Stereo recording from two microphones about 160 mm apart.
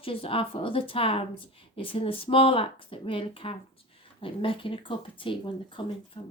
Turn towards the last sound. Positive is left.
turn(degrees=35)  # may be behind; listen again after turning